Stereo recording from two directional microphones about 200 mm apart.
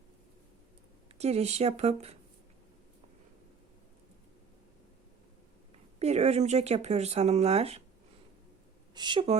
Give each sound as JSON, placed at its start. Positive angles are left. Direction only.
{"t": 1.2, "sound": "speech", "side_deg": -30}
{"t": 6.0, "sound": "speech", "side_deg": -35}
{"t": 9.0, "sound": "a woman's voice", "side_deg": -25}